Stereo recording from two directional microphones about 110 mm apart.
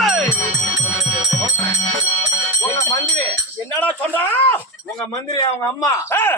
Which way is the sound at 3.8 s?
15° left (ahead or behind).